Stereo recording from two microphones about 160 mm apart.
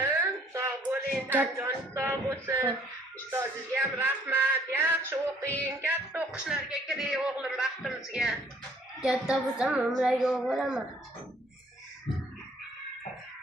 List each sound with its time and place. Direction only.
0.0 s a sound: 15° right (ahead or behind)
3.2 s music: 15° right (ahead or behind)
5.6 s speech: 10° right (ahead or behind)